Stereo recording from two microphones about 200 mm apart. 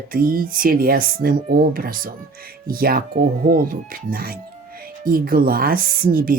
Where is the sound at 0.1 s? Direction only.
45° right (ahead or behind).